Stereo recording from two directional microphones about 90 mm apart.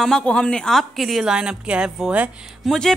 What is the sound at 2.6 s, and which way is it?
Speech, 5° left (ahead or behind).